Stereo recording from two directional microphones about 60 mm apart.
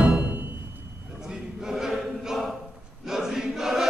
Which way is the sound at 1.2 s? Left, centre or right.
Centre.